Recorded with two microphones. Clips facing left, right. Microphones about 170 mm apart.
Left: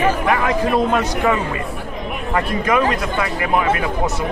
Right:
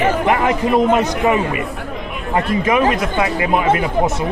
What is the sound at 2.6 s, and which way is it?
Speech, 20° right (ahead or behind).